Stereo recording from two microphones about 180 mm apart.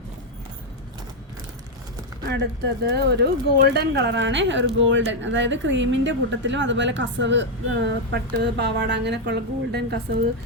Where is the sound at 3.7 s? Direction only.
70° right (ahead or behind).